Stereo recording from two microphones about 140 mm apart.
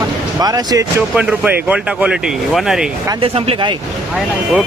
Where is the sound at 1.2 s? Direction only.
10° right (ahead or behind).